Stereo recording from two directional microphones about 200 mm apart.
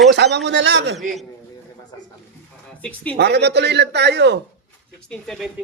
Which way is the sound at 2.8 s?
5° left (ahead or behind).